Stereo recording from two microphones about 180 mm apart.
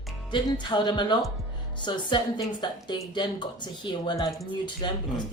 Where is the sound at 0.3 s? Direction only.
25° left (ahead or behind).